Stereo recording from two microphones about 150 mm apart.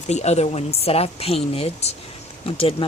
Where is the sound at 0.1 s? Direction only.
45° left (ahead or behind).